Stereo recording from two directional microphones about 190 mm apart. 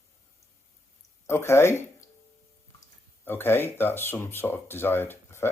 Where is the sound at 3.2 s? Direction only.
10° left (ahead or behind).